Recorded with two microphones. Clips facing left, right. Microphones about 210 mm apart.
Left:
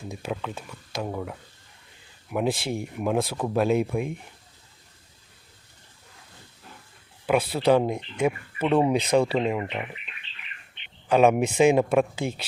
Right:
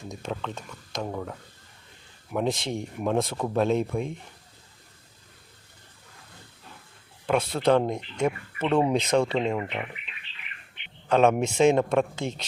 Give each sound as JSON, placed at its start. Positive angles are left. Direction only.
{"t": 0.0, "sound": "speech", "side_deg": 5}
{"t": 7.3, "sound": "speech", "side_deg": 5}
{"t": 11.1, "sound": "speech", "side_deg": 10}